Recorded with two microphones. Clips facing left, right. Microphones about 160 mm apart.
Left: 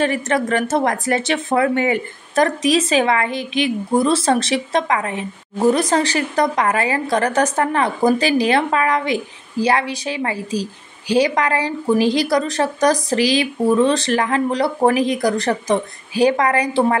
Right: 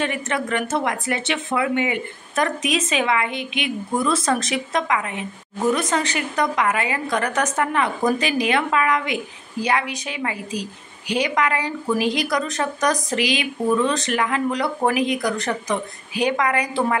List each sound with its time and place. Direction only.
0.0 s a woman's voice: 35° left (ahead or behind)